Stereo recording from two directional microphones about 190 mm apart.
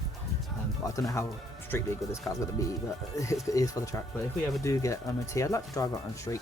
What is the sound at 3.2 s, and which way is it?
Speech, 15° left (ahead or behind).